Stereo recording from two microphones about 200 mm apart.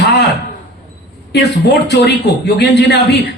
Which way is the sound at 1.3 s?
55° left (ahead or behind).